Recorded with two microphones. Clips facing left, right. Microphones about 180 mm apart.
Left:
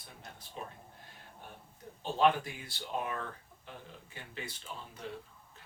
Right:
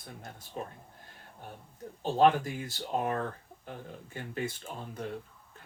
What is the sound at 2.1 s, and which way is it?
Speech, 45° right (ahead or behind).